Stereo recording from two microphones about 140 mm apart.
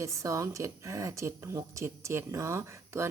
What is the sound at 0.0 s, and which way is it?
Speech, 20° right (ahead or behind).